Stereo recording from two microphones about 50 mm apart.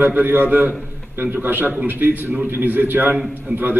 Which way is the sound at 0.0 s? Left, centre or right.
Right.